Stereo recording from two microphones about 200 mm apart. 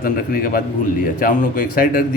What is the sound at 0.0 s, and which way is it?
Speech, 45° left (ahead or behind).